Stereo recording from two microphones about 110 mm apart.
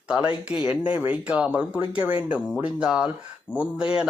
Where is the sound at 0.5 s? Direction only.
10° right (ahead or behind).